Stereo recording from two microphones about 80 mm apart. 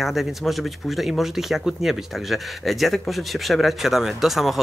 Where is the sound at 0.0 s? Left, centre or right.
Centre.